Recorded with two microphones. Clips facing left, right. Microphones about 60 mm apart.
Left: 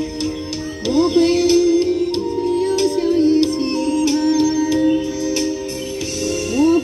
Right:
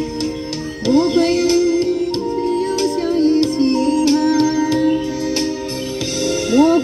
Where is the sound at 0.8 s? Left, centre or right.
Right.